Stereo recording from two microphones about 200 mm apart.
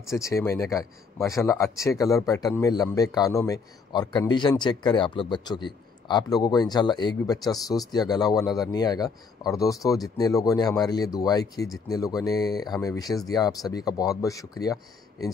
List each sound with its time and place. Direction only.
0.1 s a man's voice: 15° left (ahead or behind)